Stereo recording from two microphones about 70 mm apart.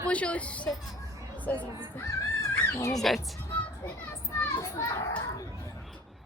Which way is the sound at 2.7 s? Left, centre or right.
Left.